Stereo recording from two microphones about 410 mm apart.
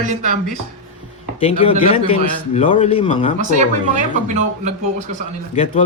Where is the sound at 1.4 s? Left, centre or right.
Centre.